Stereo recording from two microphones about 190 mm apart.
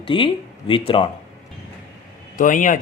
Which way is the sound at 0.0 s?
25° left (ahead or behind).